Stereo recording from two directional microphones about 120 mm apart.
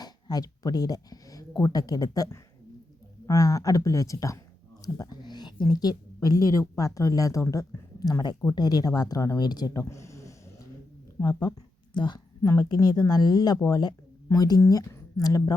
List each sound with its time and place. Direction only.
0.0 s speech: 35° left (ahead or behind)